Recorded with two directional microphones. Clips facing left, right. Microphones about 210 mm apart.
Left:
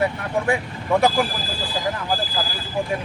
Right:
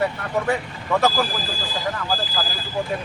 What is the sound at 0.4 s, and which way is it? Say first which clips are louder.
Speech: left 1 dB; 10° left (ahead or behind).